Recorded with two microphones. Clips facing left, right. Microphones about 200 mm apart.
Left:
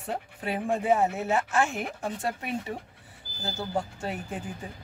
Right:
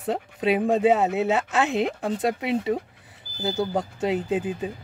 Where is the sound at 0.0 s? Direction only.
20° right (ahead or behind).